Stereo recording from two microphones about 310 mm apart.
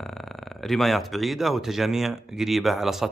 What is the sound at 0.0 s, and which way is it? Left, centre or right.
A man's voice, centre.